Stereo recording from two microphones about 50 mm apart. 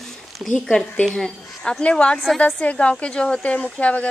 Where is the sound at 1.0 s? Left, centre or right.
Centre.